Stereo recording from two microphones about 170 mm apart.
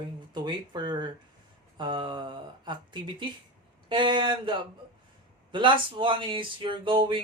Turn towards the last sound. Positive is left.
turn(degrees=-30)  # may be behind; listen again after turning